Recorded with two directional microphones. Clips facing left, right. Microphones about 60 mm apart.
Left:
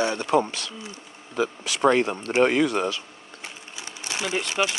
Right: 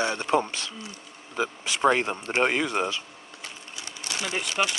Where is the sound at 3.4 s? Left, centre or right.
Left.